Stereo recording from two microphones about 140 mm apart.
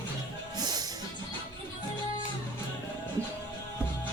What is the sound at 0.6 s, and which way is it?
Music, 30° right (ahead or behind).